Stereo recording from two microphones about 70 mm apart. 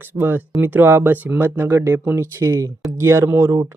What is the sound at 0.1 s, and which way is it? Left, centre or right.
Speech, right.